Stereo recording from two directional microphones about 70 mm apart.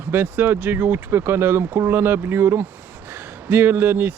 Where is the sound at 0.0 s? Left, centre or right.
Right.